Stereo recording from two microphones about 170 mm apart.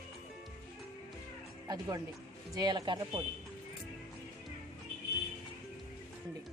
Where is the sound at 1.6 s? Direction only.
20° right (ahead or behind).